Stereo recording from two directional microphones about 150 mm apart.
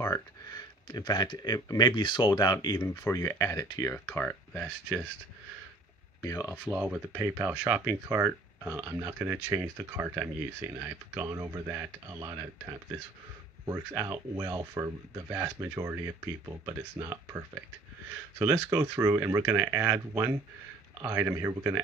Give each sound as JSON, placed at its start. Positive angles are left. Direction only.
{"t": 0.0, "sound": "speech", "side_deg": 25}
{"t": 3.9, "sound": "speech", "side_deg": 10}
{"t": 6.2, "sound": "speech", "side_deg": 25}
{"t": 6.6, "sound": "speech", "side_deg": -10}
{"t": 18.4, "sound": "speech", "side_deg": -20}